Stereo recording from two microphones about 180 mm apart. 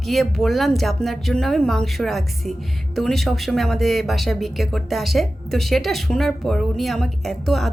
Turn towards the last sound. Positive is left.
turn(degrees=0)  # may be behind; listen again after turning